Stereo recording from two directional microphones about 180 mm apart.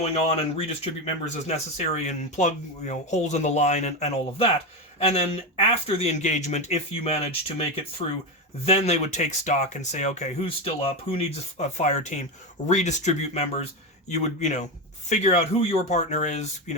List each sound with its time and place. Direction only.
0.0 s speech: 35° left (ahead or behind)
8.6 s speech: 35° left (ahead or behind)